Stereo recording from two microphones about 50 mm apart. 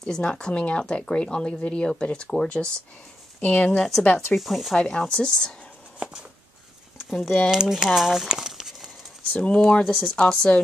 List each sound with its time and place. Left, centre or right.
0.0 s speech: centre
3.3 s speech: left
4.4 s speech: centre
4.7 s speech: centre
7.1 s speech: centre
9.5 s speech: left